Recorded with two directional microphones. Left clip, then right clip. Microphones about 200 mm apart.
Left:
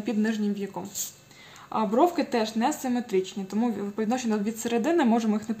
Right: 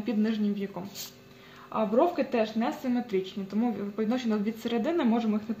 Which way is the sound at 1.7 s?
40° left (ahead or behind).